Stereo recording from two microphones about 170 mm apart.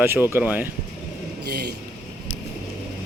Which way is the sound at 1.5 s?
65° right (ahead or behind).